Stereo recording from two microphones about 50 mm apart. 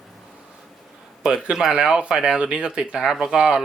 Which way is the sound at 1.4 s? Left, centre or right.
Centre.